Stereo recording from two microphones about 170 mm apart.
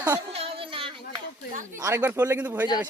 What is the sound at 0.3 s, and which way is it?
Child singing, 30° right (ahead or behind).